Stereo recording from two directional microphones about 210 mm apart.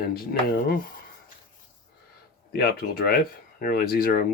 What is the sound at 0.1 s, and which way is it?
Speech, 45° left (ahead or behind).